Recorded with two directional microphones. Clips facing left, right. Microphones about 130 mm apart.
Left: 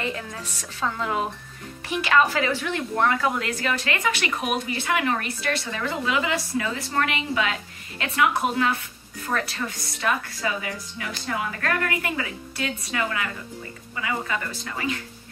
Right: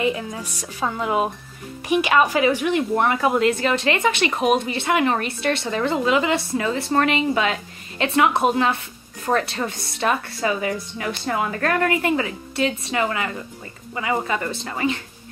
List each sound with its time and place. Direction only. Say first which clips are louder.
0.0 s a woman's voice: right 7 dB; 15° right (ahead or behind)